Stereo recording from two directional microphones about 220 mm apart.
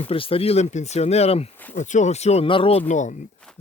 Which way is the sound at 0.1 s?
25° left (ahead or behind).